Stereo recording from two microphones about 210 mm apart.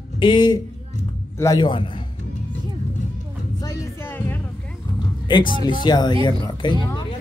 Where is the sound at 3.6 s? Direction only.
15° left (ahead or behind).